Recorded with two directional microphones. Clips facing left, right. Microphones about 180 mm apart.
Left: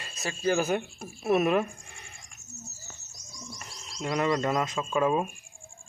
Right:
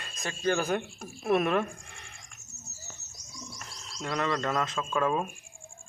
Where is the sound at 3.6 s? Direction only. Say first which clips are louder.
Left 4 dB; 10° left (ahead or behind).